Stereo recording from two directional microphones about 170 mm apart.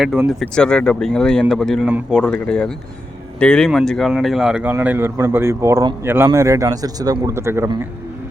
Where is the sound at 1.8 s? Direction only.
10° right (ahead or behind).